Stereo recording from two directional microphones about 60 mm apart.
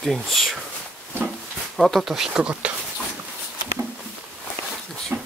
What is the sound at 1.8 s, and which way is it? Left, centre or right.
Speech, centre.